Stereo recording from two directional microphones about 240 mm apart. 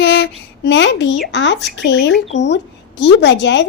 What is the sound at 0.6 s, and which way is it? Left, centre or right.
A child's voice, left.